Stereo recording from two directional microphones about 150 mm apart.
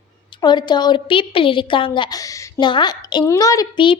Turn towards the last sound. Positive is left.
turn(degrees=25)  # may be behind; listen again after turning